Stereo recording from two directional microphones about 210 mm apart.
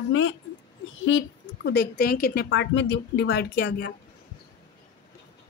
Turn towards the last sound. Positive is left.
turn(degrees=50)  # may be behind; listen again after turning